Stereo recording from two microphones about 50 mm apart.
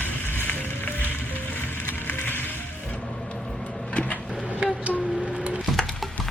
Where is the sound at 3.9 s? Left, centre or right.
Left.